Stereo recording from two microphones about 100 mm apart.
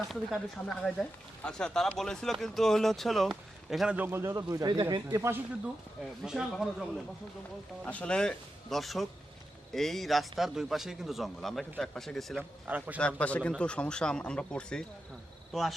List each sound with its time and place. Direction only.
0.1 s a man's voice: centre (ahead or behind)
0.6 s a man's voice: 10° left (ahead or behind)
3.9 s speech: 20° right (ahead or behind); by 5.0 s 45° right (ahead or behind)
5.1 s speech: 30° right (ahead or behind)
5.6 s a man's voice: 5° right (ahead or behind)
7.9 s a man's voice: 10° left (ahead or behind)
12.4 s a man's voice: 15° right (ahead or behind)
13.0 s a man's voice: 10° left (ahead or behind)